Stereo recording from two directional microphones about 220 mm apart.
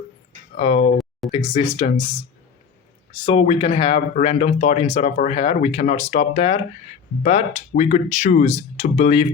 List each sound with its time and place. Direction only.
0.5 s speech: 30° left (ahead or behind)
3.1 s speech: 25° left (ahead or behind)